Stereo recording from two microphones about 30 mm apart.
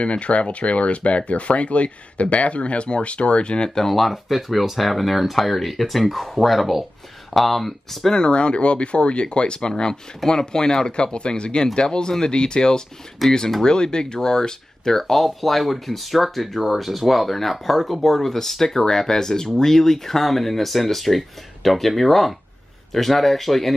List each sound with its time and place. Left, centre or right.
0.0 s speech: left
3.7 s speech: centre
8.3 s speech: left
9.6 s speech: left
13.2 s speech: centre
13.7 s speech: left
14.9 s speech: centre